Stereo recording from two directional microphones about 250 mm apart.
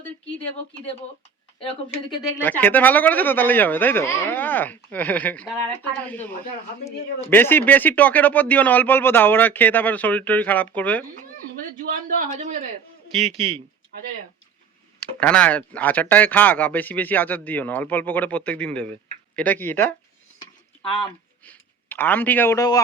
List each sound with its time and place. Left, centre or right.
1.5 s speech: left
12.0 s a man's voice: right
15.2 s speech: centre
21.0 s speech: centre